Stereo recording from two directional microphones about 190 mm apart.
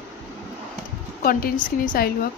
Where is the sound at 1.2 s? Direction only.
50° left (ahead or behind).